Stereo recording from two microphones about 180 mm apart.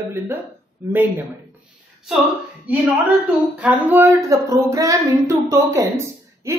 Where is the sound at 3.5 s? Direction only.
10° right (ahead or behind).